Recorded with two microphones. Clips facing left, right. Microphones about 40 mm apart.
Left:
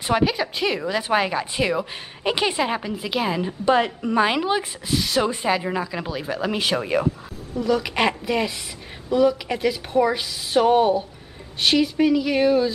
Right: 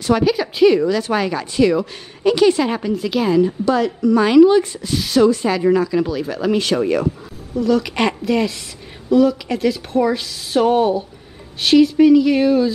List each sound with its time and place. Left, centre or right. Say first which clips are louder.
0.0 s a woman's voice: right 4 dB; centre
0.8 s a woman's voice: right 3 dB; centre
3.6 s a woman's voice: right 3 dB; left
4.9 s speech: right 4 dB; centre
5.2 s a woman's voice: right 8 dB; centre